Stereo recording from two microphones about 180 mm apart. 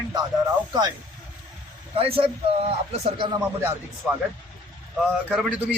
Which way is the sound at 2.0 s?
30° right (ahead or behind).